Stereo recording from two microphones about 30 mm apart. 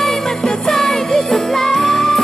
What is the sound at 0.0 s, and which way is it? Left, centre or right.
Music, centre.